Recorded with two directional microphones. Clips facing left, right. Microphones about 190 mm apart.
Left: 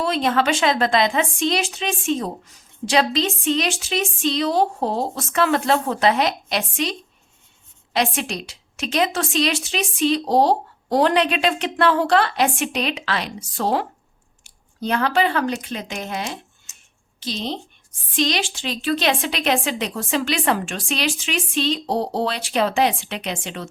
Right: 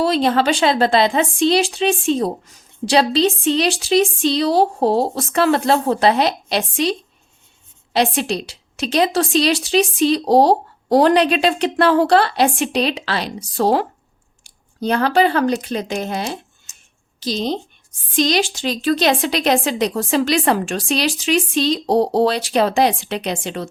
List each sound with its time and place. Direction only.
0.0 s a woman's voice: 35° right (ahead or behind)
7.9 s a woman's voice: 35° right (ahead or behind)